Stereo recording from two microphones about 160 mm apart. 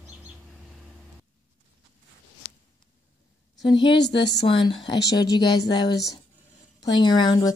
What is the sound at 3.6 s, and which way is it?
A woman's voice, 30° left (ahead or behind).